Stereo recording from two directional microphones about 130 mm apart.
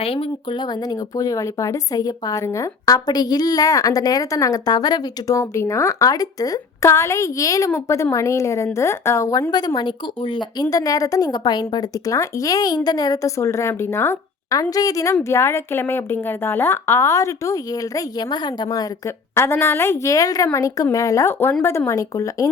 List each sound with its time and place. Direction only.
0.0 s speech: 45° left (ahead or behind); by 22.4 s 25° left (ahead or behind)